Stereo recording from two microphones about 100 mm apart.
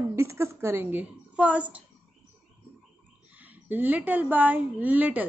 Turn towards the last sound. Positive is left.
turn(degrees=-15)  # may be behind; listen again after turning